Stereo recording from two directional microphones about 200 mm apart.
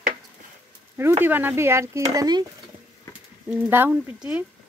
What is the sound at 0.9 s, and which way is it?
Speech, 10° right (ahead or behind).